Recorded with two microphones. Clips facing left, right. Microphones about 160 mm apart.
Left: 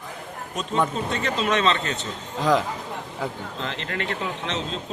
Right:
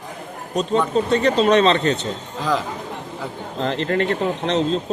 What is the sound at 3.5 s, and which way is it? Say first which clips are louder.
Speech: right 9 dB; 35° right (ahead or behind).